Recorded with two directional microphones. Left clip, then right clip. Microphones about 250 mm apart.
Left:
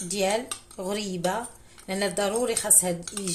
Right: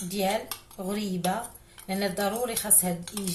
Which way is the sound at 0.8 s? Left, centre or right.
Left.